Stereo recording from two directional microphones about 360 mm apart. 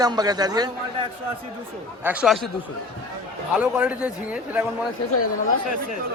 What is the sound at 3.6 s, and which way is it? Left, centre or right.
Speech, centre.